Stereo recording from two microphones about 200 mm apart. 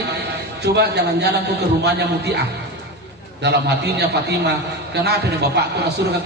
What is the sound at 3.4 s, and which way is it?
A man's voice, 55° right (ahead or behind).